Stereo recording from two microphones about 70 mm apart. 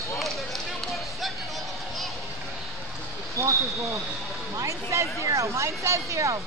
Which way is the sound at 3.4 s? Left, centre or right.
Right.